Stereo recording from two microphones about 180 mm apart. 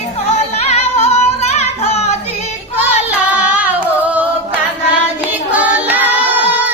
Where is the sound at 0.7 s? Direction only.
35° left (ahead or behind).